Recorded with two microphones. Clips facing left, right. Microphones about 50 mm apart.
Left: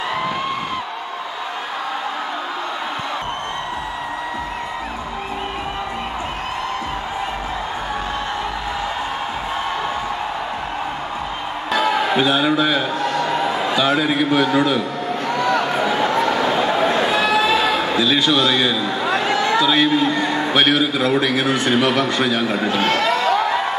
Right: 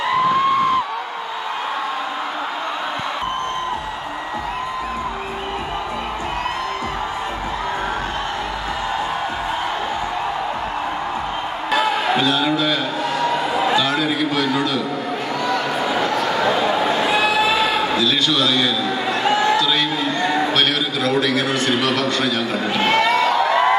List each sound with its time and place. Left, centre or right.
12.2 s a man's voice: centre
17.2 s a sound: centre
17.9 s a man's voice: centre